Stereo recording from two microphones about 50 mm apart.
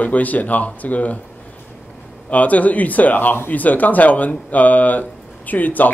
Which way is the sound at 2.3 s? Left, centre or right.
Left.